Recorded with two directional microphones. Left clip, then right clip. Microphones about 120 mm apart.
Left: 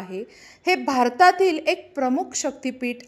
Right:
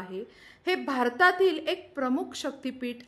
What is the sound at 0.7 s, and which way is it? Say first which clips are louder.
Speech: left 7 dB; 35° left (ahead or behind).